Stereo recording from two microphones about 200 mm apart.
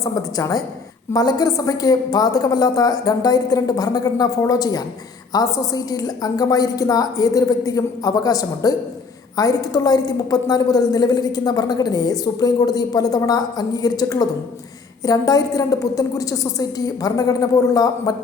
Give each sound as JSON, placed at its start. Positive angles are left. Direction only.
{"t": 0.0, "sound": "a woman's voice", "side_deg": 15}